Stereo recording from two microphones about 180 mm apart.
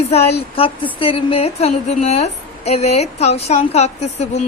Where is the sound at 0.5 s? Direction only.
30° left (ahead or behind).